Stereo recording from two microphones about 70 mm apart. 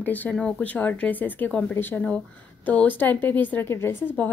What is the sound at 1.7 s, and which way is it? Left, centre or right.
Speech, left.